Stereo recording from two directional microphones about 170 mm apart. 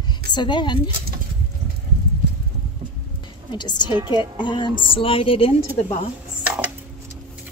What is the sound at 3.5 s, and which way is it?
Speech, 25° left (ahead or behind).